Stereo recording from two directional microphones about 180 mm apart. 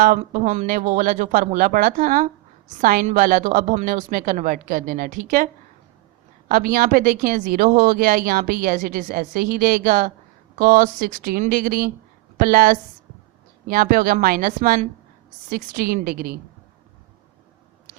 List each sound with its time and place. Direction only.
0.0 s speech: 45° right (ahead or behind)
6.5 s speech: 50° right (ahead or behind)